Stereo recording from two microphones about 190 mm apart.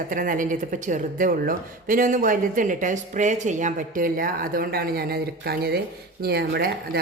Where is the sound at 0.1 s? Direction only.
45° right (ahead or behind).